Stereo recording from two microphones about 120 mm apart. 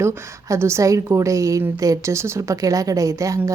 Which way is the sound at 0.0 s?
25° right (ahead or behind).